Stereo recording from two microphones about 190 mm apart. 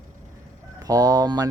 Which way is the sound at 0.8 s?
20° right (ahead or behind).